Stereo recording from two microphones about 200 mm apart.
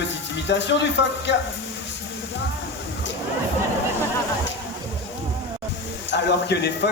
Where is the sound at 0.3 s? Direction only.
60° left (ahead or behind).